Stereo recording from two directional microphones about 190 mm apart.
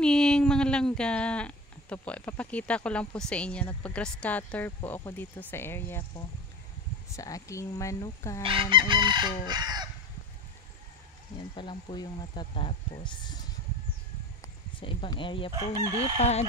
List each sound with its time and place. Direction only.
0.0 s speech: 5° left (ahead or behind)
8.5 s chicken: 25° right (ahead or behind)
11.3 s speech: 25° left (ahead or behind)
14.4 s speech: 25° left (ahead or behind)
15.5 s chicken: 15° right (ahead or behind)
16.2 s speech: 35° left (ahead or behind)